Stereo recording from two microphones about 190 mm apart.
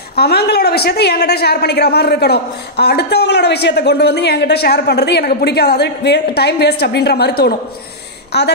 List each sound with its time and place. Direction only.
0.1 s a woman's voice: 55° left (ahead or behind)